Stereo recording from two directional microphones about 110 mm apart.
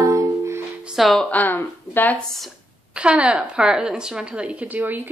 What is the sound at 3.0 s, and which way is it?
A woman's voice, 10° right (ahead or behind).